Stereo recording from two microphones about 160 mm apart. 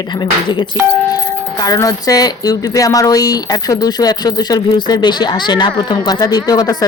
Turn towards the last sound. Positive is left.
turn(degrees=25)  # may be behind; listen again after turning